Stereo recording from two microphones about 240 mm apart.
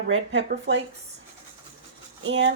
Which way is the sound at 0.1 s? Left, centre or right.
Right.